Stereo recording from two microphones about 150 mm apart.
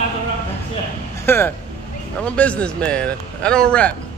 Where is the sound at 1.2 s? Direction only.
15° left (ahead or behind).